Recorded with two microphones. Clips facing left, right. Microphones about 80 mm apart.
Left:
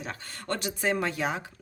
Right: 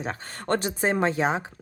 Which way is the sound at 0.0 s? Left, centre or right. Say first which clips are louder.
Right 6 dB; right.